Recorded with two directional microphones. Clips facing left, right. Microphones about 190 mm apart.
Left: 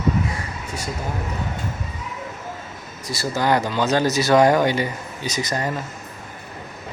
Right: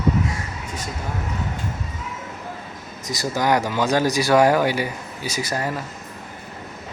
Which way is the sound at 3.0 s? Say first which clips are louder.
Even; 15° right (ahead or behind).